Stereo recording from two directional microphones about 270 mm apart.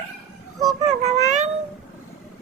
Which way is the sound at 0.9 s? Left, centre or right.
Right.